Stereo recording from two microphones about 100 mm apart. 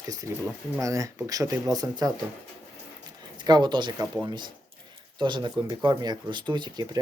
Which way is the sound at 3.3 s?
45° right (ahead or behind).